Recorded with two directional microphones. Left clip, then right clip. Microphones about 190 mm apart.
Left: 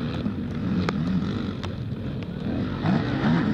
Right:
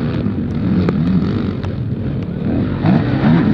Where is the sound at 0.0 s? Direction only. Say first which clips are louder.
Right 9 dB; 10° right (ahead or behind).